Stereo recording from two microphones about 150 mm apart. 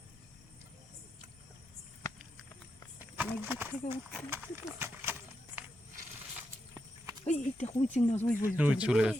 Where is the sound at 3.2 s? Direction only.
15° right (ahead or behind).